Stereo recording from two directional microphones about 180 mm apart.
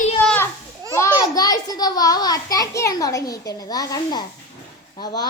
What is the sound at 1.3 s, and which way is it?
A child's voice, 20° left (ahead or behind).